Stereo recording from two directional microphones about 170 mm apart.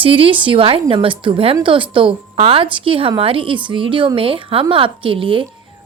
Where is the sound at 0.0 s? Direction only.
30° right (ahead or behind).